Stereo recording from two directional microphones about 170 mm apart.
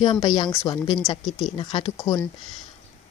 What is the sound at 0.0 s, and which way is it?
Speech, 25° left (ahead or behind).